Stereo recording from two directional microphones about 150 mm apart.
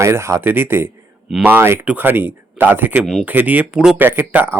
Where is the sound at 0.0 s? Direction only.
20° right (ahead or behind).